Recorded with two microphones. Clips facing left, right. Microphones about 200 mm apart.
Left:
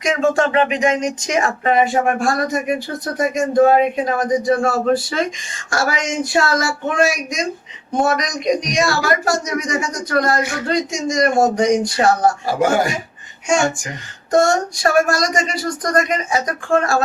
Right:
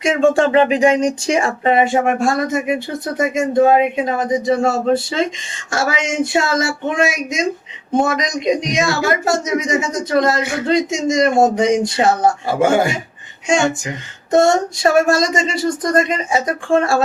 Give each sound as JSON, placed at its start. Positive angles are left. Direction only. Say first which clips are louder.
{"t": 0.0, "sound": "speech", "louder": "right 3 dB", "side_deg": -30}